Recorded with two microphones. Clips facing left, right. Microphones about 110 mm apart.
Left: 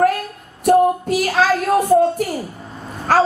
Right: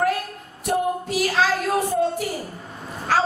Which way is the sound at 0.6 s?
50° left (ahead or behind).